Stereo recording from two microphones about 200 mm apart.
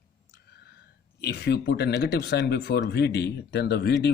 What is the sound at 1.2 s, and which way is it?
A man's voice, 55° left (ahead or behind).